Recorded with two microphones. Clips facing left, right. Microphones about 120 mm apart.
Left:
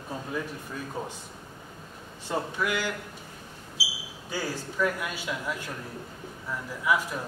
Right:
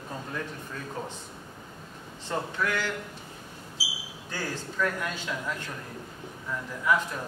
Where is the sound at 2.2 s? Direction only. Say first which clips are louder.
Left 1 dB; 10° left (ahead or behind).